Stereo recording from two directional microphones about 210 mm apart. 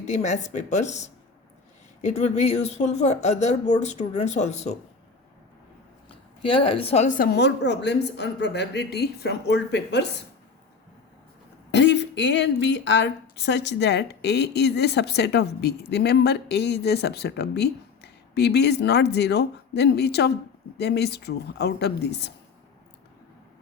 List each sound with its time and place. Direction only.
0.0 s speech: 35° left (ahead or behind)
6.1 s speech: 25° left (ahead or behind); by 10.1 s 55° left (ahead or behind)
11.7 s speech: 55° left (ahead or behind)